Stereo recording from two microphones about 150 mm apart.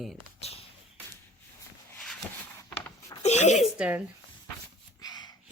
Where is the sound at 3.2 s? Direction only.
50° left (ahead or behind).